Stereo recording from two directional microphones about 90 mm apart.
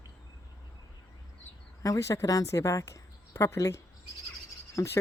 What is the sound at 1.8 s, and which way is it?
A woman's voice, 35° left (ahead or behind).